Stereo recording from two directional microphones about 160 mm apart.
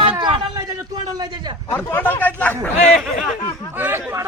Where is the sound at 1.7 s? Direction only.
15° left (ahead or behind).